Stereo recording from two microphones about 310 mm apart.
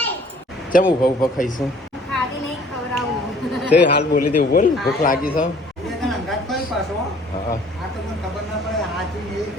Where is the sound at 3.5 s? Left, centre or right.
Centre.